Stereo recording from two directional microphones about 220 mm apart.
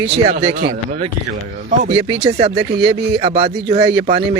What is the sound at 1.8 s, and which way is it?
Speech, 30° right (ahead or behind).